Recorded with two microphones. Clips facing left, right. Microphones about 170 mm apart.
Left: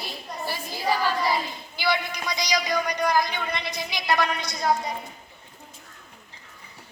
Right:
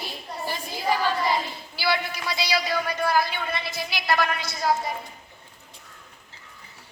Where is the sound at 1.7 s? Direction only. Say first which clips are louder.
Even; 20° left (ahead or behind).